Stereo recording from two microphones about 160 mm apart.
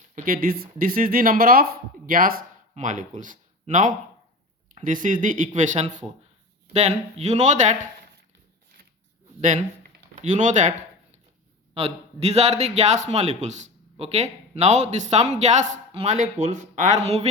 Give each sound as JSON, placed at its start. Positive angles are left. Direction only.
{"t": 0.3, "sound": "speech", "side_deg": -65}
{"t": 2.7, "sound": "a man's voice", "side_deg": -50}
{"t": 10.2, "sound": "a man's voice", "side_deg": -50}